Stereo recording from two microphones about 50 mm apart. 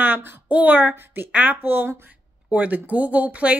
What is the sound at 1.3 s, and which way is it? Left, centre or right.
Speech, right.